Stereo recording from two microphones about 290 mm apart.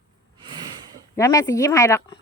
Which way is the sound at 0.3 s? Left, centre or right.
Centre.